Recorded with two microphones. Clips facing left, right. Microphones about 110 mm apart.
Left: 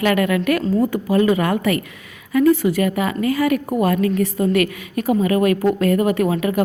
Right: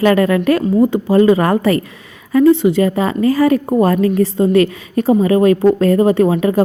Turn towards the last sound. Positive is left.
turn(degrees=-30)  # may be behind; listen again after turning